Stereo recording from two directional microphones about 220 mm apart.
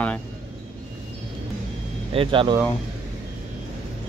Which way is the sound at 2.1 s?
25° right (ahead or behind).